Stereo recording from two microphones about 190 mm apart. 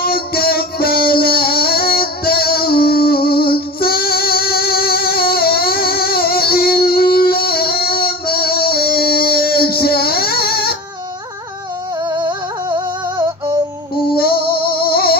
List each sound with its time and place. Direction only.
0.0 s music: 55° left (ahead or behind)
12.2 s music: 20° right (ahead or behind)
14.1 s music: 55° left (ahead or behind)